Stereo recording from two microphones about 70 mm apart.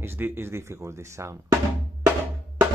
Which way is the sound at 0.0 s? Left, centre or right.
Right.